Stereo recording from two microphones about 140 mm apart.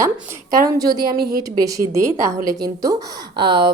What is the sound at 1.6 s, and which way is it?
A woman's voice, 25° right (ahead or behind).